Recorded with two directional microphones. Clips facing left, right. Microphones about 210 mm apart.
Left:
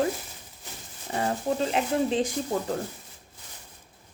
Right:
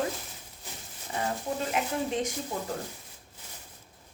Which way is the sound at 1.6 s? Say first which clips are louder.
Left 5 dB; 30° left (ahead or behind).